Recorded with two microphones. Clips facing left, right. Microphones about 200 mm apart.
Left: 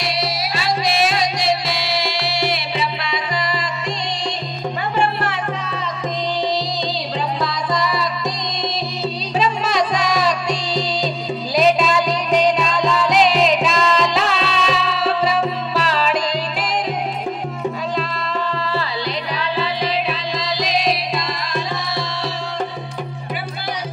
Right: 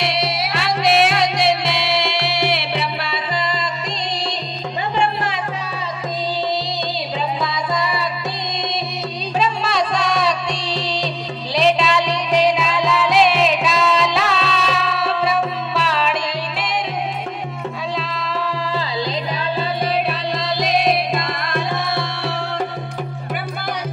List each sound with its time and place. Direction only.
0.0 s music: 60° right (ahead or behind)
4.9 s music: 15° right (ahead or behind)
9.9 s music: 5° left (ahead or behind)
20.3 s music: 55° right (ahead or behind)